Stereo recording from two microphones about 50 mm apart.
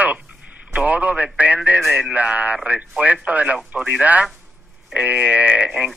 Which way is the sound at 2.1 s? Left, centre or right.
Right.